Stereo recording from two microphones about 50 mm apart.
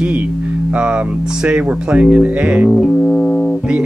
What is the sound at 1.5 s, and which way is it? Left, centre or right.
Speech, right.